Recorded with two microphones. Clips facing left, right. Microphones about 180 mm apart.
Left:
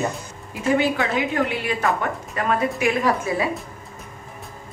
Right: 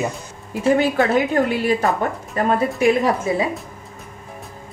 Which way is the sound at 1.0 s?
40° right (ahead or behind).